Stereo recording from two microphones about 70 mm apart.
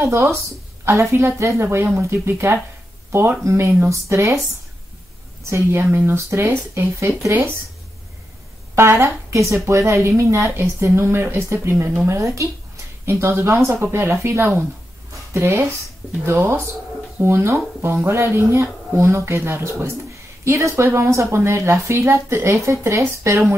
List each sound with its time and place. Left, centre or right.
0.0 s speech: right
5.5 s speech: right
9.0 s speech: right